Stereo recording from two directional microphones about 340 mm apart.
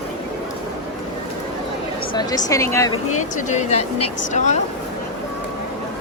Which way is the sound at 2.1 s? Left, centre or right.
Centre.